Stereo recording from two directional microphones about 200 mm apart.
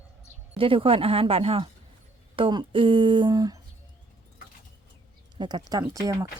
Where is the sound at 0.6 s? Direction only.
25° right (ahead or behind).